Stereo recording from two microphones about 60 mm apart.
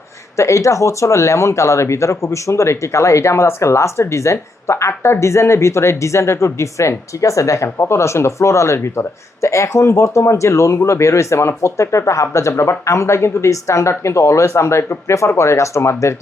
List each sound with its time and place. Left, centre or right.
0.3 s speech: left